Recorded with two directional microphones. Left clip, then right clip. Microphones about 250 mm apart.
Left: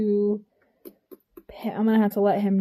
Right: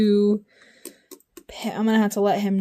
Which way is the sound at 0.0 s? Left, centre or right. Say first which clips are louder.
Right 4 dB; right.